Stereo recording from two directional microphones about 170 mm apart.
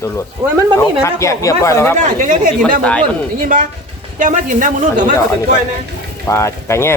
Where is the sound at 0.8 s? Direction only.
15° left (ahead or behind).